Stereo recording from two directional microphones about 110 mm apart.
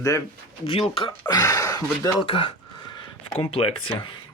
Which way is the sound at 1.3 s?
30° left (ahead or behind).